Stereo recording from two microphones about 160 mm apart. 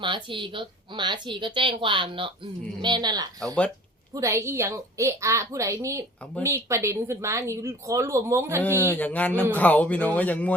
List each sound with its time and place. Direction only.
0.0 s a woman's voice: 30° right (ahead or behind); by 8.6 s 15° right (ahead or behind)
8.6 s speech: 15° left (ahead or behind)